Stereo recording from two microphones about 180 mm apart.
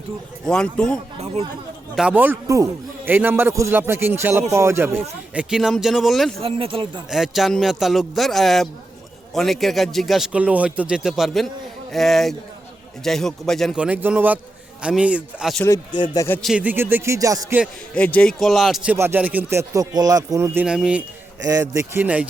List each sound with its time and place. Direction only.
0.4 s a man's voice: 5° left (ahead or behind)
2.0 s a man's voice: 10° right (ahead or behind)
6.4 s speech: 30° right (ahead or behind)
7.1 s a man's voice: centre (ahead or behind)
15.6 s speech: 20° left (ahead or behind)
16.4 s a man's voice: 5° right (ahead or behind)
17.9 s a man's voice: 5° left (ahead or behind)
18.9 s a man's voice: 10° right (ahead or behind)
21.4 s a man's voice: 20° right (ahead or behind)